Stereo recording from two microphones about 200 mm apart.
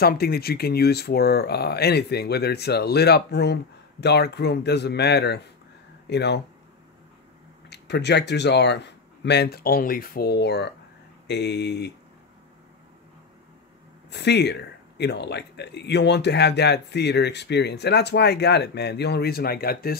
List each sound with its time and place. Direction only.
0.0 s speech: 50° left (ahead or behind)
7.7 s speech: 55° left (ahead or behind)
14.1 s speech: 60° left (ahead or behind)